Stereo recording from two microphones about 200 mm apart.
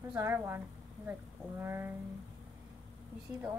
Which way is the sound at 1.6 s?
10° right (ahead or behind).